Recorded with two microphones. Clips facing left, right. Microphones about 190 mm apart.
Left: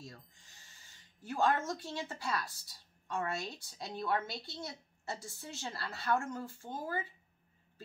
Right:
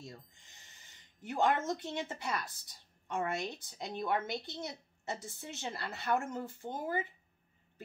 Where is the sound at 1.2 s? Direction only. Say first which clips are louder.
Right 1 dB; 20° right (ahead or behind).